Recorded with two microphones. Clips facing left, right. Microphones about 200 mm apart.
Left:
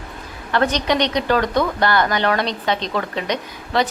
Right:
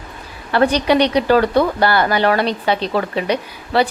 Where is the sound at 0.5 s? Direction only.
10° right (ahead or behind).